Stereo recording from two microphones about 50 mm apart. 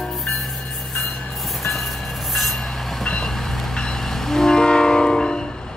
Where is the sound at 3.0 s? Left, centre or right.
Centre.